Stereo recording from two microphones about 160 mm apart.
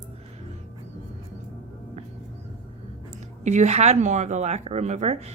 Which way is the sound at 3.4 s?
45° right (ahead or behind).